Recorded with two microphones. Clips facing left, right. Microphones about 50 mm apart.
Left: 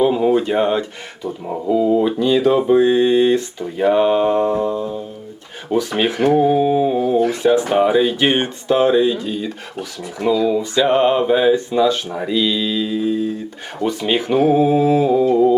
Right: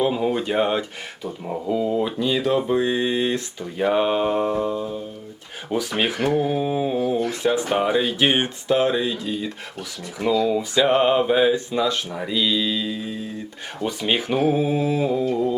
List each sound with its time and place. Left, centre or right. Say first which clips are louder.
0.0 s speech: left 6 dB; centre
1.9 s carnatic music: left 7 dB; centre
2.1 s speech: left 6 dB; centre
2.8 s speech: left 8 dB; centre
15.1 s carnatic music: left 8 dB; centre